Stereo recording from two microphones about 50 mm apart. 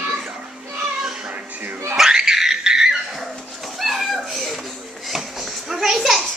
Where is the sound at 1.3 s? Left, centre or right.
Right.